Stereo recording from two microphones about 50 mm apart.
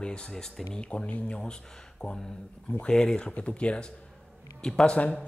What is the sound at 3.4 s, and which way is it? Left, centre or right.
Speech, left.